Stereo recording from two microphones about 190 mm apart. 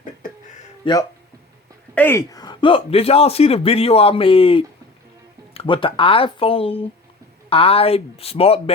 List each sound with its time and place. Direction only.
0.8 s a man's voice: 25° left (ahead or behind)
2.0 s a man's voice: 15° left (ahead or behind); by 8.7 s 30° left (ahead or behind)